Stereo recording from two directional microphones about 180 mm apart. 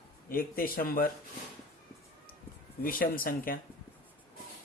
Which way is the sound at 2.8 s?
55° left (ahead or behind).